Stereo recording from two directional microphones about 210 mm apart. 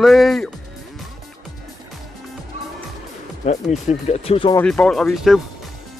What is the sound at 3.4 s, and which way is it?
Speech, 35° left (ahead or behind).